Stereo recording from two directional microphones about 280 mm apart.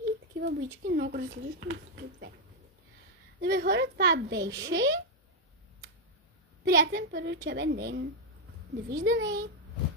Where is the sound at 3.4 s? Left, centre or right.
Right.